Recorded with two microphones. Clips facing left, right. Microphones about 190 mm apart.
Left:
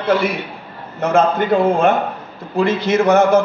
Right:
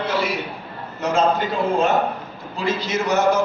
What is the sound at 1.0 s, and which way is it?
A man's voice, 55° left (ahead or behind).